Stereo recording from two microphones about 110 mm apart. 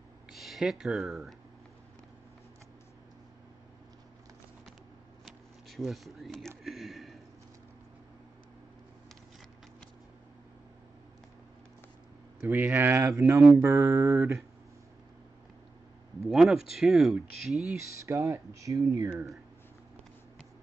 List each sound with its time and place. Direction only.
0.3 s speech: centre (ahead or behind)
5.2 s a sound: centre (ahead or behind)
6.6 s speech: centre (ahead or behind)
12.4 s speech: 15° right (ahead or behind)
16.3 s speech: 5° right (ahead or behind)
18.0 s speech: 30° right (ahead or behind)